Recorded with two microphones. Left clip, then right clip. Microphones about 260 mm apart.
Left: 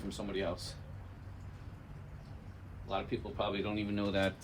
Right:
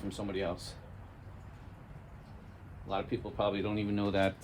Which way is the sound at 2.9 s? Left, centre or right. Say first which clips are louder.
Right 2 dB; right.